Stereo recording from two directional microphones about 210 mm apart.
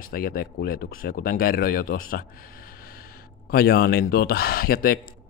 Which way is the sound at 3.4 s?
45° left (ahead or behind).